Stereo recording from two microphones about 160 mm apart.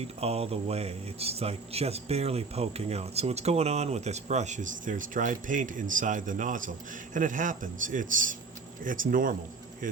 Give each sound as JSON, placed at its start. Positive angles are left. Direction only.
{"t": 0.2, "sound": "a man's voice", "side_deg": -40}